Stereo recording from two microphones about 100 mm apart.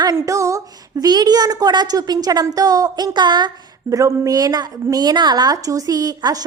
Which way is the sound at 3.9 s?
30° right (ahead or behind).